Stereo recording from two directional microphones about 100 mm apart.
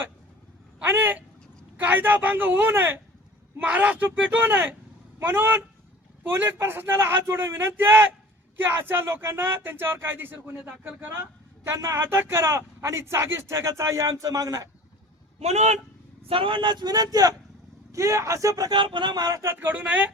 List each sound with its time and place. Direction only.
0.9 s speech: 20° right (ahead or behind)
15.4 s a man's voice: 90° right
16.3 s speech: 60° right (ahead or behind)
16.8 s speech: 40° right (ahead or behind)
18.8 s speech: 50° right (ahead or behind); by 19.5 s 30° right (ahead or behind)
19.5 s speech: 15° right (ahead or behind)